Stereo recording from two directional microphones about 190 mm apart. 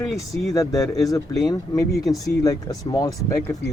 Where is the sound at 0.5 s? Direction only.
15° left (ahead or behind).